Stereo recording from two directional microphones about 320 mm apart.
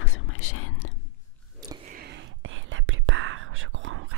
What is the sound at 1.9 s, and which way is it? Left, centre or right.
Whispering, right.